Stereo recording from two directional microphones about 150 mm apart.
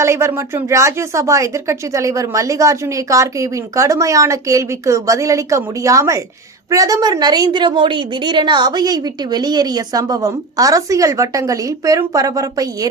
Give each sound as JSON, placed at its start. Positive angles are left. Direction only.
{"t": 0.0, "sound": "a woman's voice", "side_deg": -20}